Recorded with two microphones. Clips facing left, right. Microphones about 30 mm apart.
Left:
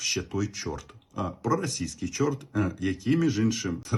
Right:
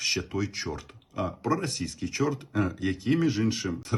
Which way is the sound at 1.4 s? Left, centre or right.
Right.